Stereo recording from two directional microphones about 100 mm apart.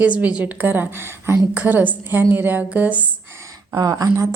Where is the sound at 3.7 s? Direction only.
35° right (ahead or behind).